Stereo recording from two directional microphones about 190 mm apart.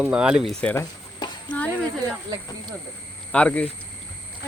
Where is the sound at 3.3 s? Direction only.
5° left (ahead or behind).